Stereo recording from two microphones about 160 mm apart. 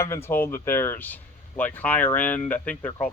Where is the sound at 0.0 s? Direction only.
15° left (ahead or behind).